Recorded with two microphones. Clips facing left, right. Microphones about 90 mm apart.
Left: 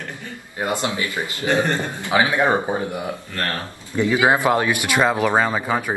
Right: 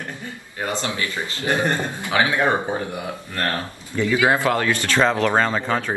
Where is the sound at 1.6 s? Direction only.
20° right (ahead or behind).